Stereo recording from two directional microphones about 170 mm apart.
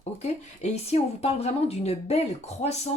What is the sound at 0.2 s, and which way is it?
Speech, 40° left (ahead or behind).